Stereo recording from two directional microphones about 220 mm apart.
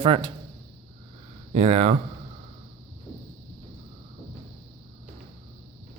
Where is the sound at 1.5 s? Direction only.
30° right (ahead or behind).